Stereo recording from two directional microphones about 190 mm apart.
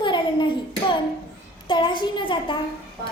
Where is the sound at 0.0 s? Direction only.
25° left (ahead or behind).